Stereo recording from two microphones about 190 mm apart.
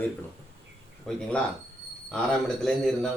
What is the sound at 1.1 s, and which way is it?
Speech, centre (ahead or behind).